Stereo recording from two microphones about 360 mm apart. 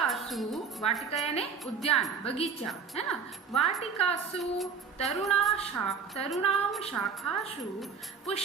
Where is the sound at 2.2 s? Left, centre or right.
Centre.